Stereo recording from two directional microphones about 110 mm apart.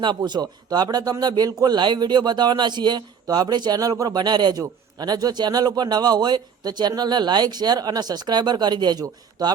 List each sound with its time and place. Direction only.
0.0 s speech: 45° right (ahead or behind)